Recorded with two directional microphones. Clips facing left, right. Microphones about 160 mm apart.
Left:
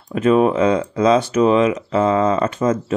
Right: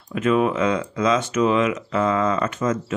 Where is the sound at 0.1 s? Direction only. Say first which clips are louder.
Left 5 dB; 35° left (ahead or behind).